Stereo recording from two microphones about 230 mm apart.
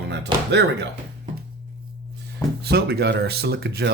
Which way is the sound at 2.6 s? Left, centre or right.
Right.